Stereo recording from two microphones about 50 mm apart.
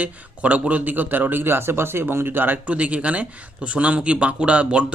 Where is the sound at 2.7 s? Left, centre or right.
Right.